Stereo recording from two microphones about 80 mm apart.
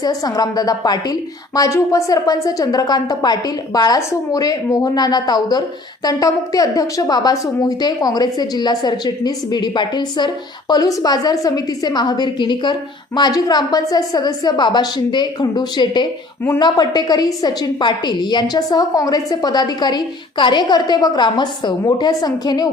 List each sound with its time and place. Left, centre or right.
0.0 s a woman's voice: left
21.3 s a woman's voice: left